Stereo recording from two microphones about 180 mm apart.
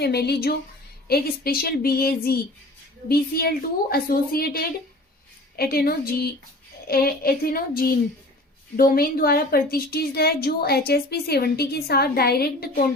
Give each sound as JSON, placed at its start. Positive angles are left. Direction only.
{"t": 0.0, "sound": "a woman's voice", "side_deg": 65}